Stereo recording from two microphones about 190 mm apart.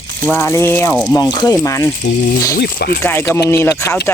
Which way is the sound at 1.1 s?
20° left (ahead or behind).